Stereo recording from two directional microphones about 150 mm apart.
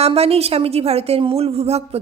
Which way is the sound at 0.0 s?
40° right (ahead or behind).